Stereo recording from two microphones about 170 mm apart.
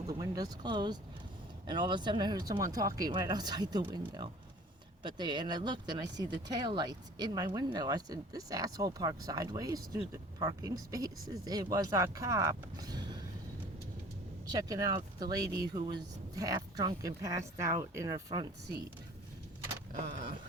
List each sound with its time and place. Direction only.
0.1 s speech: 20° right (ahead or behind)
14.5 s speech: 20° right (ahead or behind)